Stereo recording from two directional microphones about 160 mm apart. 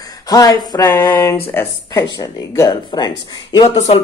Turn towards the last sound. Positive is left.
turn(degrees=30)  # may be behind; listen again after turning